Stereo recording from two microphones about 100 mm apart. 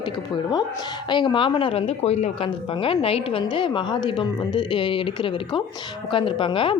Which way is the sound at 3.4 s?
50° left (ahead or behind).